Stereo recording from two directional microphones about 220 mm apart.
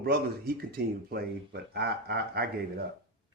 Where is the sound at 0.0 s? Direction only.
45° right (ahead or behind).